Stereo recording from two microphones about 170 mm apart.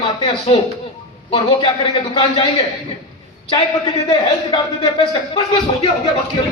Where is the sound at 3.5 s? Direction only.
35° left (ahead or behind).